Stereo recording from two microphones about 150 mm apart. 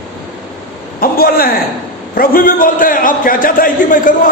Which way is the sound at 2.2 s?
70° left (ahead or behind).